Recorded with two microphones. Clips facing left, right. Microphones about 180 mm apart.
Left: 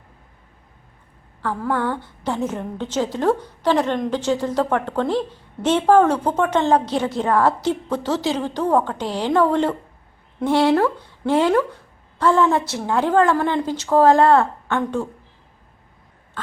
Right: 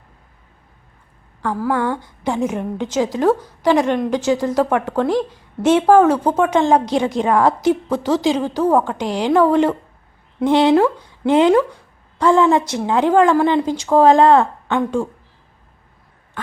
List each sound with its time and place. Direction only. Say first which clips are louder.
1.4 s a woman's voice: right 3 dB; 10° right (ahead or behind)